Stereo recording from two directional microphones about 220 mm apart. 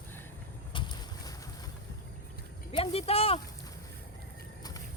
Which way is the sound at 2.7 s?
25° left (ahead or behind).